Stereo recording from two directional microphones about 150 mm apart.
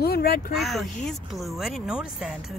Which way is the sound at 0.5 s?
Centre (ahead or behind).